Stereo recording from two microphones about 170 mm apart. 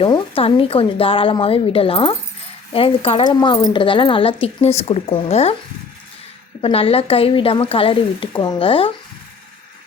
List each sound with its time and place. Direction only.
0.0 s speech: 30° left (ahead or behind)
6.6 s speech: 35° left (ahead or behind)